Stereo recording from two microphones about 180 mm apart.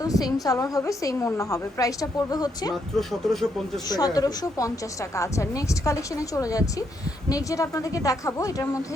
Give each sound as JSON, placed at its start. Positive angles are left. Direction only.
{"t": 0.0, "sound": "a woman's voice", "side_deg": 20}
{"t": 3.0, "sound": "speech", "side_deg": 0}
{"t": 3.8, "sound": "a woman's voice", "side_deg": 20}